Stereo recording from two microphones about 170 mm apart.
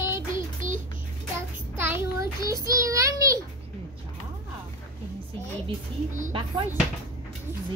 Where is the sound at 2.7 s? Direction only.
20° right (ahead or behind).